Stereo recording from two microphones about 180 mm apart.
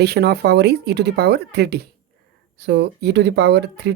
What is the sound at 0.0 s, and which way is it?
Speech, 65° right (ahead or behind).